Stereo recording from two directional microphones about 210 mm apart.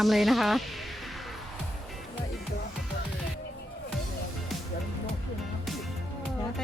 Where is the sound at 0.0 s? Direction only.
Centre (ahead or behind).